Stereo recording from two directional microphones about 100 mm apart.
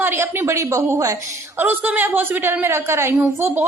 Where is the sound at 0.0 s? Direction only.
20° right (ahead or behind).